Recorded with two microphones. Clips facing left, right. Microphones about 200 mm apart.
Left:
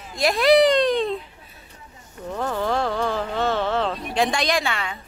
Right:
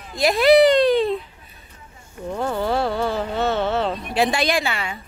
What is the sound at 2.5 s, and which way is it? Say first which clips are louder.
Speech: right 1 dB; 5° right (ahead or behind).